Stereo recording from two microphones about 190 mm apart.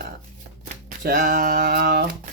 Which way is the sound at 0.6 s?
50° right (ahead or behind).